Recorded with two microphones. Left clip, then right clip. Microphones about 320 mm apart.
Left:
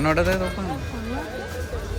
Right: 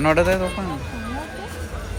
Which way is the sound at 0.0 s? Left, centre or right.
Centre.